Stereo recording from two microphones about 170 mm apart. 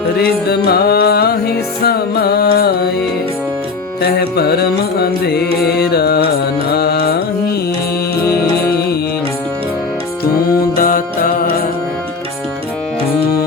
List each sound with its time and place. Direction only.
0.2 s music: 70° left (ahead or behind)
4.0 s music: 65° left (ahead or behind)
8.2 s music: 70° left (ahead or behind)
10.8 s music: 55° left (ahead or behind)